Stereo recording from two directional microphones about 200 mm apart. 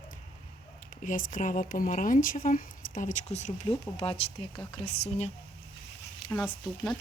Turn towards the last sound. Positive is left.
turn(degrees=5)  # may be behind; listen again after turning